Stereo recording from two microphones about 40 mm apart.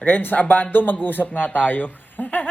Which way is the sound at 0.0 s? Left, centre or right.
Left.